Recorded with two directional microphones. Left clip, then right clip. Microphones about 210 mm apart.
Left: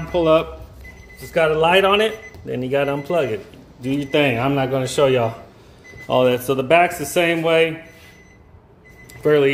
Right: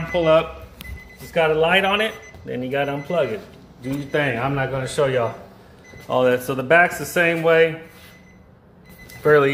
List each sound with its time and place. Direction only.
0.1 s speech: 20° left (ahead or behind)
1.3 s a man's voice: 35° left (ahead or behind)
9.2 s speech: 15° left (ahead or behind)